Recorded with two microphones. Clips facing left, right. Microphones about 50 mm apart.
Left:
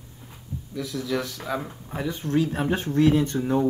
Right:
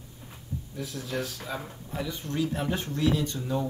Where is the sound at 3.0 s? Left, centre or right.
Left.